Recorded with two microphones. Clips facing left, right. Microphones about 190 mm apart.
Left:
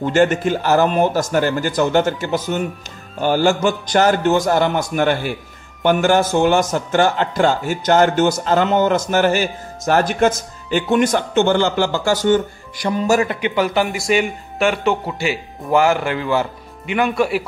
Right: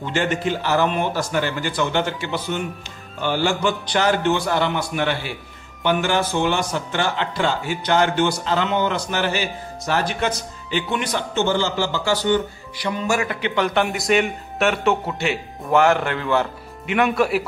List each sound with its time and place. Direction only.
0.0 s speech: 45° left (ahead or behind)
13.6 s a man's voice: 5° left (ahead or behind)